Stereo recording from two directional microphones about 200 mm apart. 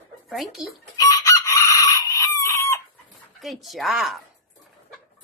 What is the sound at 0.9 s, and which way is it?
Chicken, 15° left (ahead or behind).